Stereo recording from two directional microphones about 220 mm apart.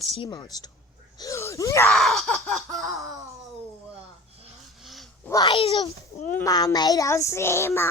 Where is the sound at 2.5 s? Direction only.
Centre (ahead or behind).